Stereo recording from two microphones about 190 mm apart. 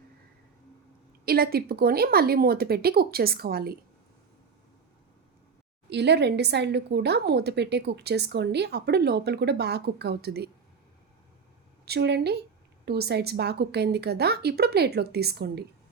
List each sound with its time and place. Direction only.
1.2 s speech: 55° right (ahead or behind)
5.9 s speech: 60° right (ahead or behind)
11.9 s speech: 60° right (ahead or behind)